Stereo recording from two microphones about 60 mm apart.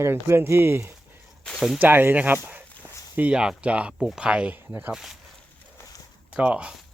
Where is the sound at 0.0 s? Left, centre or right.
Right.